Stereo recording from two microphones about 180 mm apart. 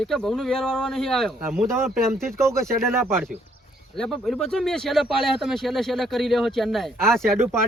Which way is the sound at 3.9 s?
Centre (ahead or behind).